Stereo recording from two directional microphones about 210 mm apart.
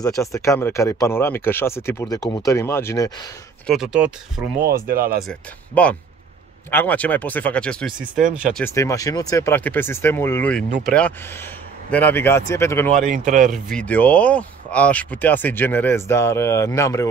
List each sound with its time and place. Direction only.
0.0 s speech: 15° left (ahead or behind)
3.6 s speech: centre (ahead or behind)
4.6 s speech: 45° right (ahead or behind)
5.3 s speech: 5° left (ahead or behind)
8.2 s speech: 40° right (ahead or behind)
8.5 s speech: 15° left (ahead or behind)
13.0 s speech: 35° right (ahead or behind)
13.5 s speech: 5° left (ahead or behind)